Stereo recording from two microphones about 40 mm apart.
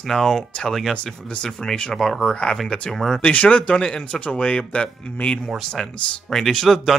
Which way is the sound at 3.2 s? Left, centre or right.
Left.